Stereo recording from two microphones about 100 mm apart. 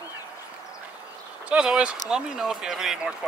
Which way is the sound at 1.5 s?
10° right (ahead or behind).